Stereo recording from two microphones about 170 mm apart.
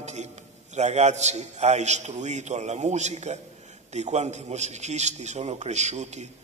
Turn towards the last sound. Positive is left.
turn(degrees=-40)  # may be behind; listen again after turning